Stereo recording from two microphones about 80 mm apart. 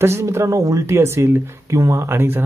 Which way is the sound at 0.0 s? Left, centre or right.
Right.